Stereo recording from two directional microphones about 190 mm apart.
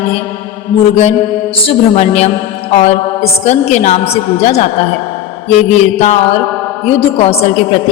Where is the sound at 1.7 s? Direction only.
35° left (ahead or behind).